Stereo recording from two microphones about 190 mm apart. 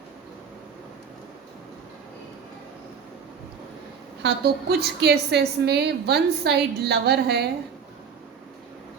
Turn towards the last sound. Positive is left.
turn(degrees=-60)  # may be behind; listen again after turning